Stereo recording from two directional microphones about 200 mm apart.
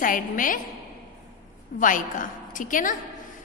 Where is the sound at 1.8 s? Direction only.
40° left (ahead or behind).